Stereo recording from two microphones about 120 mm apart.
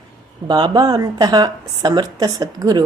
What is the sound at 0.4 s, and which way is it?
Speech, 40° right (ahead or behind).